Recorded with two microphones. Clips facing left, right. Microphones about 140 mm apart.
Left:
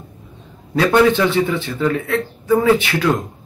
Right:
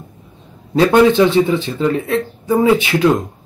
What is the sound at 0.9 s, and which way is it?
A man's voice, 20° right (ahead or behind).